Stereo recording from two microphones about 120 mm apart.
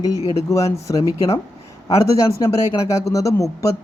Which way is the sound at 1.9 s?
25° left (ahead or behind).